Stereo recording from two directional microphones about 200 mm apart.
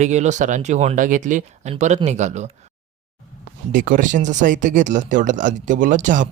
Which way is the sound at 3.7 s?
45° right (ahead or behind).